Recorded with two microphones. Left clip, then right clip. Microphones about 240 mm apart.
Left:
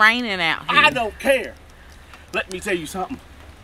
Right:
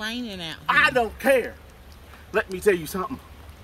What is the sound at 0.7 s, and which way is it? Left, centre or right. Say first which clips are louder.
Speech: left 1 dB; centre.